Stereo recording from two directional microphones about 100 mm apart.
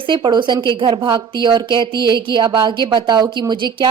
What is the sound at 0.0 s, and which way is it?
Speech, 50° right (ahead or behind).